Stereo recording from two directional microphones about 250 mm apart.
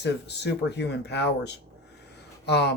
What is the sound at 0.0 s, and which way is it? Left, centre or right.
Speech, left.